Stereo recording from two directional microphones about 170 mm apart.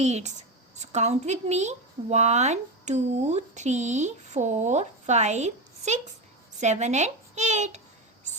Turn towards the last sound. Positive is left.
turn(degrees=-45)  # may be behind; listen again after turning